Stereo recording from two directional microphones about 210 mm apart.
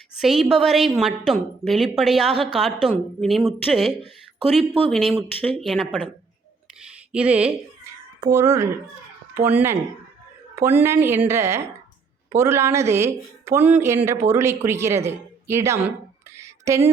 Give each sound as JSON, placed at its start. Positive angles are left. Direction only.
{"t": 0.2, "sound": "a woman's voice", "side_deg": 0}
{"t": 7.1, "sound": "a woman's voice", "side_deg": -5}
{"t": 8.2, "sound": "speech", "side_deg": -15}
{"t": 16.4, "sound": "a sound", "side_deg": -15}